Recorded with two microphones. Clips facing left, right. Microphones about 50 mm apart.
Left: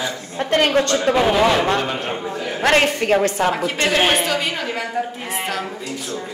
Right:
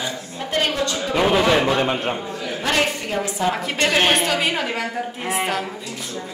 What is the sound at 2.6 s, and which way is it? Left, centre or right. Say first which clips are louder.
Speech: left 5 dB; left.